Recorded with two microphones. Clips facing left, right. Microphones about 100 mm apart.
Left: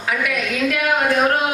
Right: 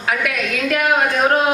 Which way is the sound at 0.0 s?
50° right (ahead or behind).